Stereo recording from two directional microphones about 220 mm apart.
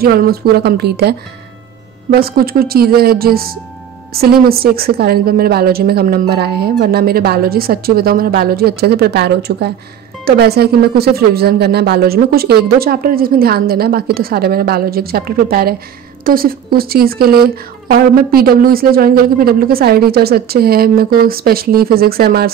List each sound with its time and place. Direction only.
0.0 s speech: 45° right (ahead or behind)